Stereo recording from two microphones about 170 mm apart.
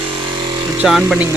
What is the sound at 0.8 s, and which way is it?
Speech, centre (ahead or behind).